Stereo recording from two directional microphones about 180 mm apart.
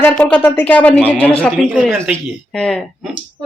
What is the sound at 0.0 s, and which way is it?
Speech, 5° left (ahead or behind).